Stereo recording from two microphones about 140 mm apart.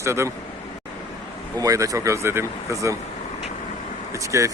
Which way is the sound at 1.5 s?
25° right (ahead or behind).